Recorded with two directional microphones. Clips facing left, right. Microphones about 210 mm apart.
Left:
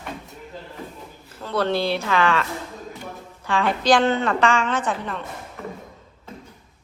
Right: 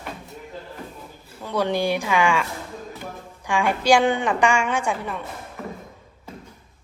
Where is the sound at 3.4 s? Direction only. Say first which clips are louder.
Even; 10° right (ahead or behind).